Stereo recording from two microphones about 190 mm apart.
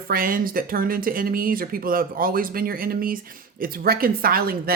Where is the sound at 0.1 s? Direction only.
50° right (ahead or behind).